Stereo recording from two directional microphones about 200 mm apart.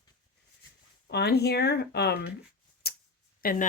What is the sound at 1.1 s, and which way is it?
Speech, 55° left (ahead or behind).